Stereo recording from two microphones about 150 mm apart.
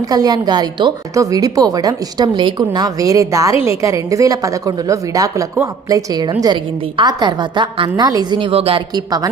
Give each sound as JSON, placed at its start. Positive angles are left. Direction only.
{"t": 0.1, "sound": "a woman's voice", "side_deg": -25}